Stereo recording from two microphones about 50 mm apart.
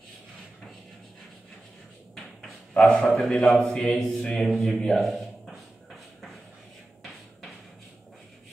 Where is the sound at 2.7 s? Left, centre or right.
Centre.